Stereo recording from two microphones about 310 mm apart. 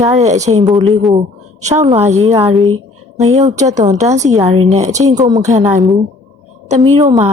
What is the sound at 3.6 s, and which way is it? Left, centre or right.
A woman's voice, right.